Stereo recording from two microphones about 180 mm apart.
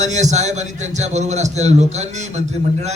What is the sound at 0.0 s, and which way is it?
A man's voice, 40° right (ahead or behind).